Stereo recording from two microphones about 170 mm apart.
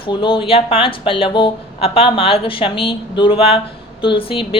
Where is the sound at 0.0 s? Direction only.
30° left (ahead or behind).